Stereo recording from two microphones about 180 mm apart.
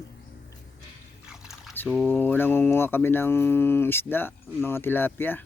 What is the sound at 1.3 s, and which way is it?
Drip, centre (ahead or behind).